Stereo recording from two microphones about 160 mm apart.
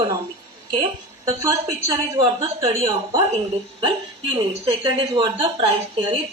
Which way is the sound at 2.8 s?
35° right (ahead or behind).